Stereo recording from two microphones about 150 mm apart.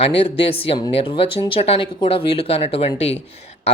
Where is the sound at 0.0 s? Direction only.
40° left (ahead or behind).